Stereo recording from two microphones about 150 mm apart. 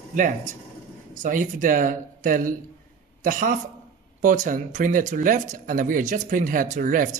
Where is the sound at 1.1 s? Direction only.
60° right (ahead or behind).